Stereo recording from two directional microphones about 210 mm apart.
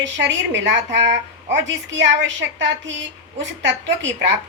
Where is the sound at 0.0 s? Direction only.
60° right (ahead or behind).